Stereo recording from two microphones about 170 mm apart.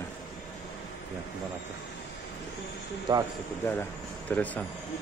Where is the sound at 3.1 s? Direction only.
25° right (ahead or behind).